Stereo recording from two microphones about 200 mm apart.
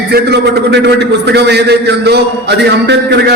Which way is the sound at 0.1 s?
55° right (ahead or behind).